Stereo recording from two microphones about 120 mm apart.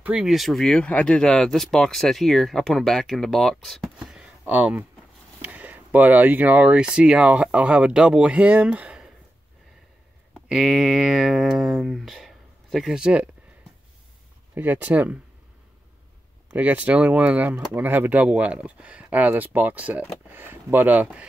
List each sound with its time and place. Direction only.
0.0 s speech: 5° right (ahead or behind)
10.3 s speech: centre (ahead or behind)
14.5 s speech: 15° right (ahead or behind)
16.4 s speech: 10° right (ahead or behind)